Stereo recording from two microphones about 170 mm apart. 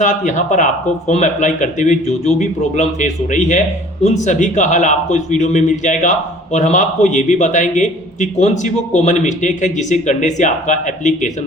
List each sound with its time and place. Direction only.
0.0 s a man's voice: 45° left (ahead or behind)